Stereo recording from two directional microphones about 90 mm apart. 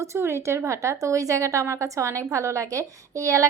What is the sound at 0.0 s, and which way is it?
A woman's voice, 30° right (ahead or behind).